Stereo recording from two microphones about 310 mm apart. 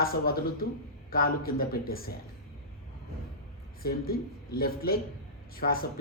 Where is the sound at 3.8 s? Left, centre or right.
Left.